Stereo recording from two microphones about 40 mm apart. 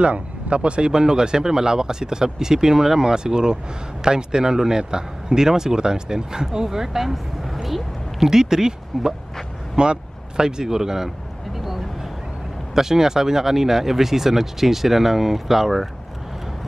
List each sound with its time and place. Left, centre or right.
0.0 s speech: right; by 11.1 s centre
11.5 s vehicle: centre
12.7 s speech: centre